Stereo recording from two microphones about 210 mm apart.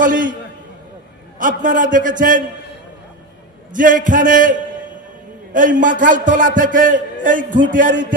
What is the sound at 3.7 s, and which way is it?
A man's voice, 40° right (ahead or behind).